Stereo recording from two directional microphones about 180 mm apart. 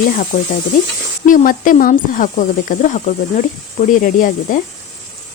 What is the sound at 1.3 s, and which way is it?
Speech, 50° left (ahead or behind).